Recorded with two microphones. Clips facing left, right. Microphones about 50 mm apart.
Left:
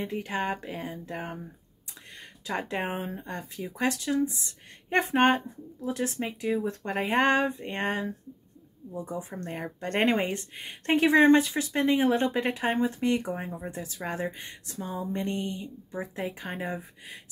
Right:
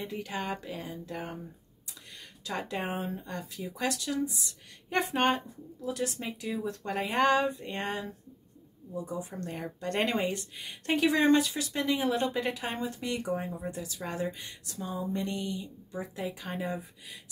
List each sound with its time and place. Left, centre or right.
0.0 s a woman's voice: left
2.4 s a woman's voice: left